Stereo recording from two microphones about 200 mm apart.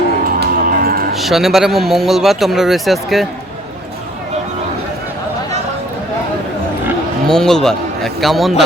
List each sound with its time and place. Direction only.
0.3 s a sound: 45° right (ahead or behind)
1.1 s speech: centre (ahead or behind)
7.3 s speech: 5° left (ahead or behind)